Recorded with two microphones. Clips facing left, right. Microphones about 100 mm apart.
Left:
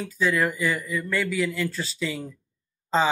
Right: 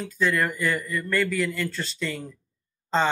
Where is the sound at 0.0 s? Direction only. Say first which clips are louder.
Left 1 dB; centre (ahead or behind).